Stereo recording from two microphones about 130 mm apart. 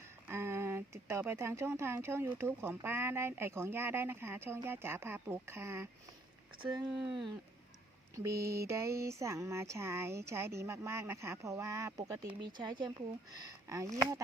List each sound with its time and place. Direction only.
0.3 s speech: 20° right (ahead or behind)
6.6 s speech: 35° right (ahead or behind)
8.1 s speech: 25° right (ahead or behind)